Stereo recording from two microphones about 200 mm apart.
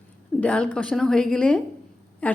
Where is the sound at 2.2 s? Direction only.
5° left (ahead or behind).